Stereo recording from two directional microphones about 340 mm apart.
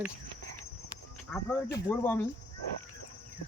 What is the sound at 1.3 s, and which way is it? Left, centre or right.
Speech, centre.